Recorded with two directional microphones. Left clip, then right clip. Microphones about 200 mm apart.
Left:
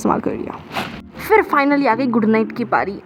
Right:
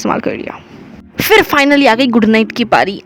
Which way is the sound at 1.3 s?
45° right (ahead or behind).